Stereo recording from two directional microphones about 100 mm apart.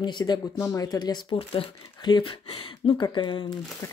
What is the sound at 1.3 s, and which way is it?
Speech, 65° left (ahead or behind).